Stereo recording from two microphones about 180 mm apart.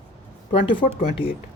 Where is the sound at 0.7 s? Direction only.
50° left (ahead or behind).